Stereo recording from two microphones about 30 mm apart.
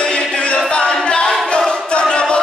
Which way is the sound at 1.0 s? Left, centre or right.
Left.